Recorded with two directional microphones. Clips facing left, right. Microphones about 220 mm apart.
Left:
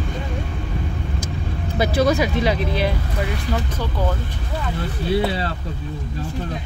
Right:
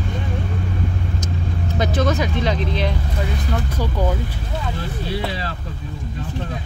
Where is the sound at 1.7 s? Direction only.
10° left (ahead or behind).